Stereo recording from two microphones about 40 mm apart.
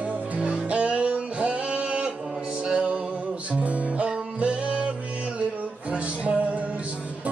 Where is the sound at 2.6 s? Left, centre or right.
Right.